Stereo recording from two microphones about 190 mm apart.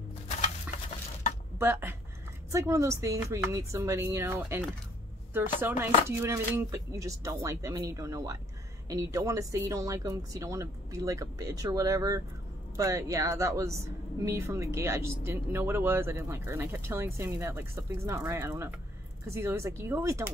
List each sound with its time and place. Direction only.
1.6 s speech: 10° right (ahead or behind)